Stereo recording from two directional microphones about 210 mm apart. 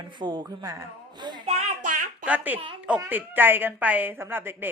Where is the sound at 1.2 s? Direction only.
25° right (ahead or behind).